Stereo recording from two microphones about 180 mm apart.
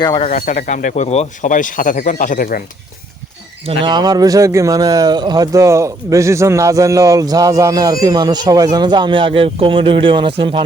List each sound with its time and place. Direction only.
0.0 s speech: 25° left (ahead or behind)
0.3 s speech: 45° left (ahead or behind)
3.7 s speech: 25° right (ahead or behind)